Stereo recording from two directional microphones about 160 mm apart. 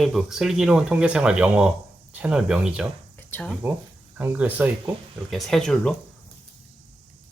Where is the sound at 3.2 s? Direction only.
10° left (ahead or behind).